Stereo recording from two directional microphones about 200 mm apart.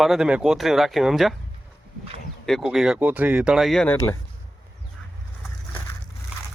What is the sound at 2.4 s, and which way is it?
Speech, centre (ahead or behind).